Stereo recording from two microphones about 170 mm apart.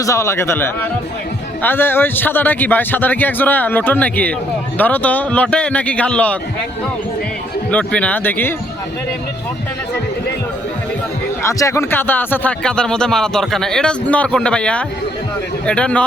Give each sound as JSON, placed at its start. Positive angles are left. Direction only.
{"t": 0.0, "sound": "a man's voice", "side_deg": 15}
{"t": 7.7, "sound": "a man's voice", "side_deg": 5}
{"t": 11.4, "sound": "a man's voice", "side_deg": 15}